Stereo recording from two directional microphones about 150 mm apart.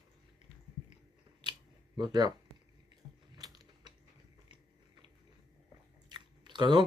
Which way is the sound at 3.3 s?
25° right (ahead or behind).